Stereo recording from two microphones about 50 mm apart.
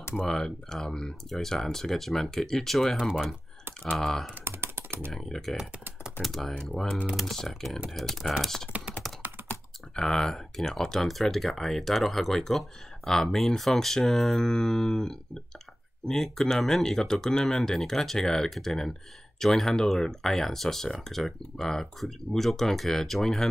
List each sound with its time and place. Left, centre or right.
0.3 s speech: centre
4.0 s speech: centre
4.5 s computer keyboard: right
5.1 s speech: centre
9.0 s computer keyboard: centre
9.9 s speech: centre